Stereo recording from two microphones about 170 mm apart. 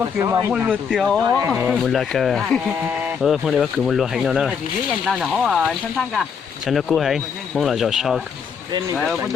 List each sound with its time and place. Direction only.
0.0 s speech: 15° right (ahead or behind)
0.9 s speech: centre (ahead or behind)
1.2 s speech: 20° right (ahead or behind)
1.7 s speech: 5° left (ahead or behind)